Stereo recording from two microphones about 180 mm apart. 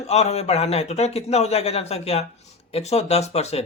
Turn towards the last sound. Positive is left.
turn(degrees=35)  # may be behind; listen again after turning